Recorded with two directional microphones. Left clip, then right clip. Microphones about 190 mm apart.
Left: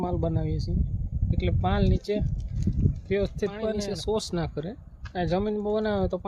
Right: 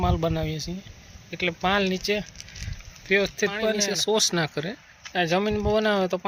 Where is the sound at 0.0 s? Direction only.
10° left (ahead or behind).